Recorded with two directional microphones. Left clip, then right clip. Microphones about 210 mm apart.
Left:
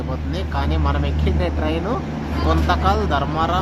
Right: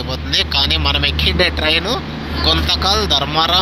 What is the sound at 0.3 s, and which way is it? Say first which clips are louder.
Speech: right 12 dB; 15° right (ahead or behind).